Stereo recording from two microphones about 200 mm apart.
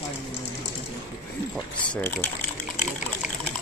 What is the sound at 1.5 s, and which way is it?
Speech, 5° left (ahead or behind).